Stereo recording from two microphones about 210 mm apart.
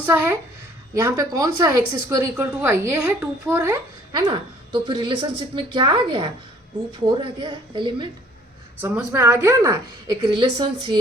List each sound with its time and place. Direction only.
0.0 s a woman's voice: 10° right (ahead or behind)
8.8 s a woman's voice: 10° right (ahead or behind)